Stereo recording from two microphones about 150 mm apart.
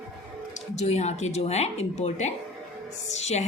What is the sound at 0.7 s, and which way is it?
A woman's voice, 45° left (ahead or behind).